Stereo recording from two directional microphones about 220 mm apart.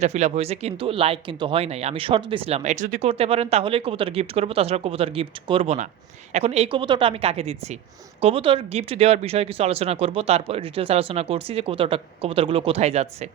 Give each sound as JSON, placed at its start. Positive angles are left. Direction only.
{"t": 0.0, "sound": "speech", "side_deg": -30}